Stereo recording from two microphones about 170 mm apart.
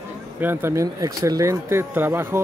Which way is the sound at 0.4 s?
10° right (ahead or behind).